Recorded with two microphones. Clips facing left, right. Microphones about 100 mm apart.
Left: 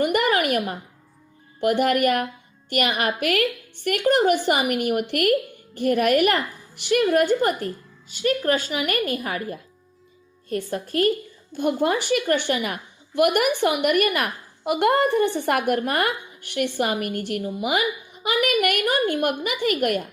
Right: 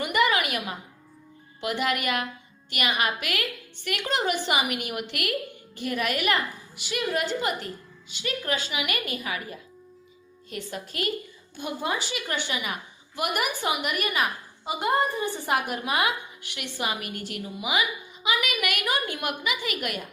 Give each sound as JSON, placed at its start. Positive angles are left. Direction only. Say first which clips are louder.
{"t": 0.0, "sound": "a sound", "louder": "left 4 dB", "side_deg": 50}
{"t": 1.6, "sound": "a woman's voice", "louder": "left 8 dB", "side_deg": 50}
{"t": 11.5, "sound": "a woman's voice", "louder": "left 8 dB", "side_deg": 55}